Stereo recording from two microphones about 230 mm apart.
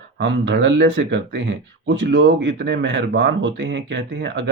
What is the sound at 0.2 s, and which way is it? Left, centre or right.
Speech, right.